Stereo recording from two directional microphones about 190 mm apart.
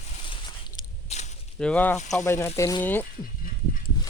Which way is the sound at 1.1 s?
35° left (ahead or behind).